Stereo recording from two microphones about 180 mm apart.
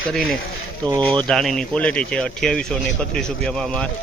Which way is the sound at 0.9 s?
25° right (ahead or behind).